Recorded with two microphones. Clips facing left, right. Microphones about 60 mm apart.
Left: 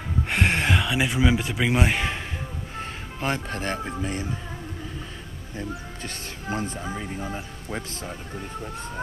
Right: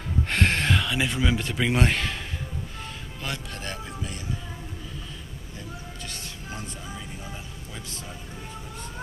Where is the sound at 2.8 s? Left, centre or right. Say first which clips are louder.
Left 10 dB; left.